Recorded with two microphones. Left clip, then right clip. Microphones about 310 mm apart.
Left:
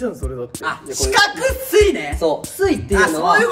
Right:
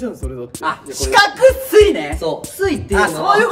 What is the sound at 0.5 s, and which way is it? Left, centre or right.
Speech, centre.